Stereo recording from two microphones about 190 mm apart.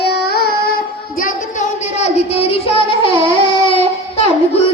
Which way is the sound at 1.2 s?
40° left (ahead or behind).